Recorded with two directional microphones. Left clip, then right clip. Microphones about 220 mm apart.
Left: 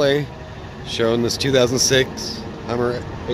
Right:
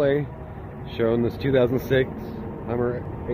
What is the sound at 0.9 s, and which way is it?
Speech, 15° left (ahead or behind).